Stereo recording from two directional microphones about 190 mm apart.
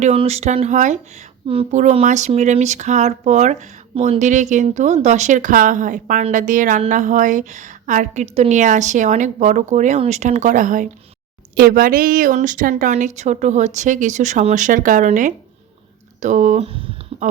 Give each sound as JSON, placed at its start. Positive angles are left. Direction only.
{"t": 0.0, "sound": "a woman's voice", "side_deg": -35}